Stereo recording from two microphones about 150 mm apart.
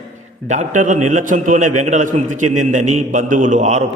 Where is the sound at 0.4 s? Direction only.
55° right (ahead or behind).